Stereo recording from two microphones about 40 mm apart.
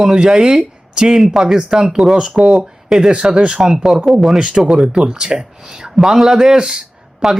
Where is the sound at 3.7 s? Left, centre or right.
Centre.